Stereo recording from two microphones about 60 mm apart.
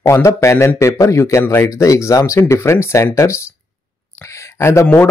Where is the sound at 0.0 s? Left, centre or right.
Left.